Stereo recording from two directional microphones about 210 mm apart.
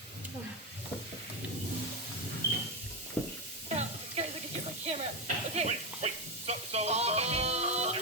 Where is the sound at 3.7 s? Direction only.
30° right (ahead or behind).